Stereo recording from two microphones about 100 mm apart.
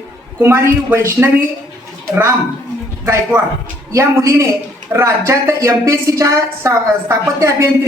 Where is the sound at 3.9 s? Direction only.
30° right (ahead or behind).